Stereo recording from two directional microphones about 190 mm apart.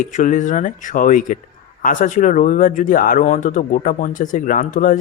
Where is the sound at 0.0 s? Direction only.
40° left (ahead or behind).